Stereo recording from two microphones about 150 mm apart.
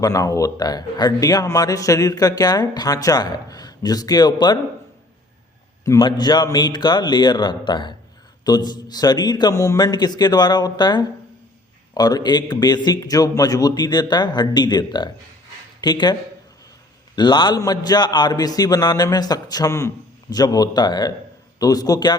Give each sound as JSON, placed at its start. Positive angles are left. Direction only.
{"t": 0.0, "sound": "a man's voice", "side_deg": 20}
{"t": 5.8, "sound": "a man's voice", "side_deg": 20}
{"t": 17.2, "sound": "a man's voice", "side_deg": 30}